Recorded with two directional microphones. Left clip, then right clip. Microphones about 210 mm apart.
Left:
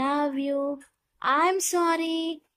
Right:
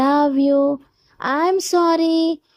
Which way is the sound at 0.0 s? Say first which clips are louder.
Right 10 dB; 20° right (ahead or behind).